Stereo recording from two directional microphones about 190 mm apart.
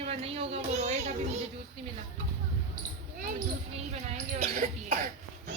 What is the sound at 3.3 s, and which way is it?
A woman's voice, 40° right (ahead or behind).